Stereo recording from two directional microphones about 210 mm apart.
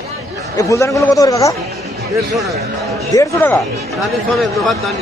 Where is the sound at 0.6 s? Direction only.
15° left (ahead or behind).